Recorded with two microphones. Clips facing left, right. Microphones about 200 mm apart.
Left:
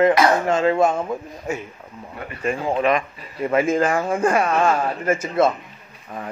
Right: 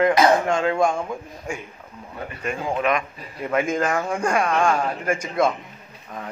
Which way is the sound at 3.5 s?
5° left (ahead or behind).